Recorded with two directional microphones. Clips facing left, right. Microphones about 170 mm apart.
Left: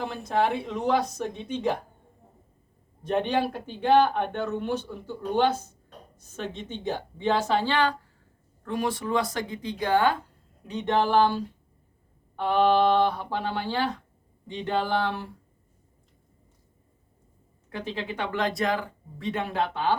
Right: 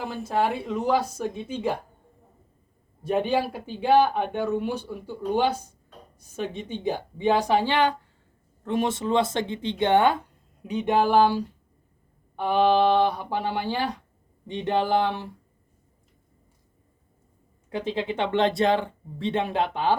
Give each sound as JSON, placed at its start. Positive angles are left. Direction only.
{"t": 0.0, "sound": "speech", "side_deg": -5}
{"t": 3.0, "sound": "speech", "side_deg": -5}
{"t": 17.7, "sound": "speech", "side_deg": -20}